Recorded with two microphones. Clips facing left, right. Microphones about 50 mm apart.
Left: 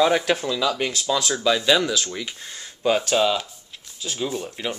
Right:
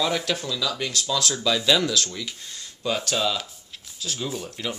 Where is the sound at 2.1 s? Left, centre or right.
Left.